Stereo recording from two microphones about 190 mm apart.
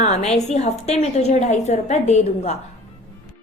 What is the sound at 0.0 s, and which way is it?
A woman's voice, 35° left (ahead or behind).